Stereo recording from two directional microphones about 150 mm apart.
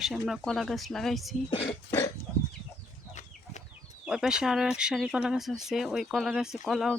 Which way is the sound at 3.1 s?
50° left (ahead or behind).